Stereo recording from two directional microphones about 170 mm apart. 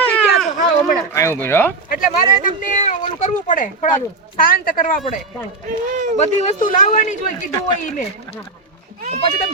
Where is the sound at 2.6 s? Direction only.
45° left (ahead or behind).